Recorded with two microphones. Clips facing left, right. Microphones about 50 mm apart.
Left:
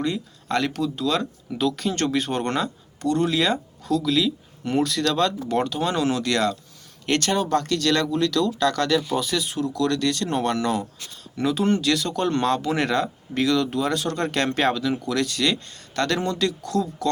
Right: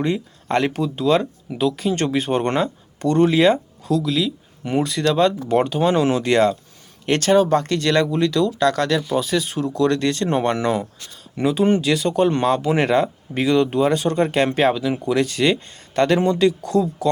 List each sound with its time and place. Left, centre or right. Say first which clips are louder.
0.0 s speech: right 4 dB; right
1.6 s speech: right 3 dB; centre; by 3.6 s right
3.8 s speech: right 1 dB; centre
9.2 s speech: right 3 dB; right
14.9 s speech: right 5 dB; right